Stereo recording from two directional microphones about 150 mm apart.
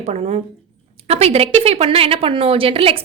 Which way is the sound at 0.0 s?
45° right (ahead or behind).